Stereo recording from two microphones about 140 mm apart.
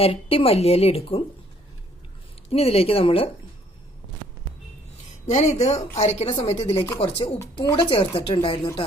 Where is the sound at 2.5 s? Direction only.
45° left (ahead or behind).